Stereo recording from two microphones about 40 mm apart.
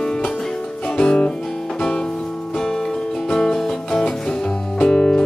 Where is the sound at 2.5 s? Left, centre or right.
Centre.